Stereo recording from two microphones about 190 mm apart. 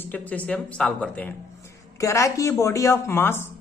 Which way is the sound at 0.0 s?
10° left (ahead or behind).